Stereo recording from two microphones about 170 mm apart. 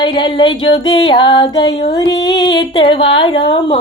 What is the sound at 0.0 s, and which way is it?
Speech, 30° left (ahead or behind).